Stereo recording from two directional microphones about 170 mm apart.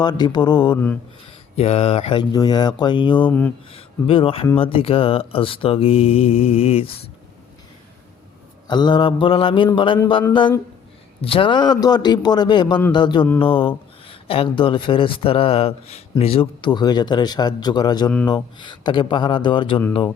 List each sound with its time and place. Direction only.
0.0 s speech: 25° left (ahead or behind)
1.5 s speech: 35° left (ahead or behind)
3.2 s speech: 10° left (ahead or behind)
3.7 s speech: 35° left (ahead or behind)
8.6 s speech: 25° left (ahead or behind)
11.2 s speech: 30° left (ahead or behind)